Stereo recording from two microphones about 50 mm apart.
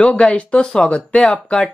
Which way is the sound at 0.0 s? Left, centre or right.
Left.